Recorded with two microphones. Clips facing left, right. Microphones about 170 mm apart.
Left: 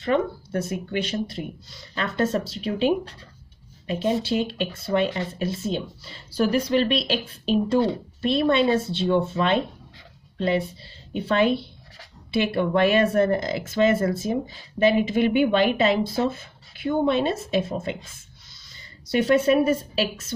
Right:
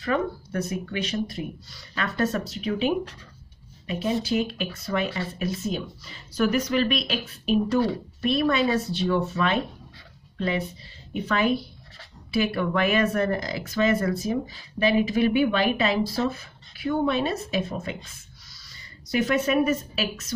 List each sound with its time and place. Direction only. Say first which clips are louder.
0.0 s a woman's voice: left 3 dB; 25° left (ahead or behind)
19.0 s speech: left 4 dB; 30° left (ahead or behind)